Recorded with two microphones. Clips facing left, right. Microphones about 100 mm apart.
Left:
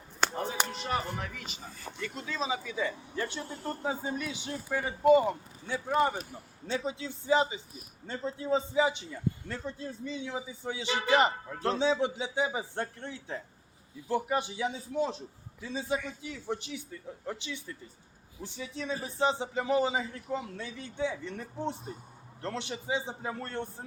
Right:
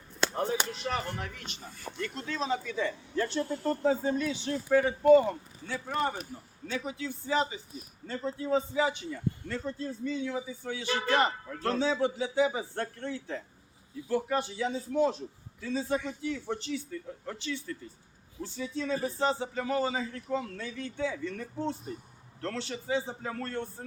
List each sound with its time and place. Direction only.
0.9 s a man's voice: centre (ahead or behind); by 6.1 s 20° left (ahead or behind)
6.7 s a man's voice: 30° left (ahead or behind)